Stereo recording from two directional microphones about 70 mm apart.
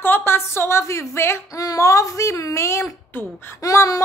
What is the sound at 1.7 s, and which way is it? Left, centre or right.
A woman's voice, left.